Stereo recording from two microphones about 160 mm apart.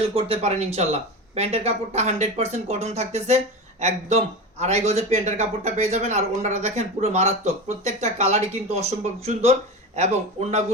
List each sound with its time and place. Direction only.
0.1 s speech: 35° right (ahead or behind)